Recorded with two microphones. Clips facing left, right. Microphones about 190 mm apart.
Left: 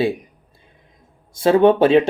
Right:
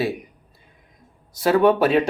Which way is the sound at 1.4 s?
25° left (ahead or behind).